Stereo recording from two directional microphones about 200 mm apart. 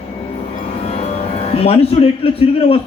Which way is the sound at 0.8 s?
30° left (ahead or behind).